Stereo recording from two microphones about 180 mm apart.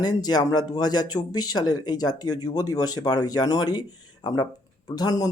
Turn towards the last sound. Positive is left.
turn(degrees=20)  # may be behind; listen again after turning